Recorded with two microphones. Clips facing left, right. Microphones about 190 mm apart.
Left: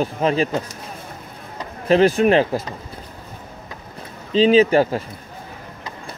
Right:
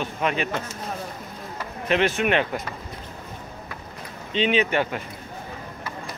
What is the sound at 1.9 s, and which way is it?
Speech, 35° left (ahead or behind).